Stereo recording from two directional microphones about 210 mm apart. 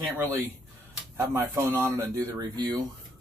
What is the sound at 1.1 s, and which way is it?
Speech, 10° right (ahead or behind).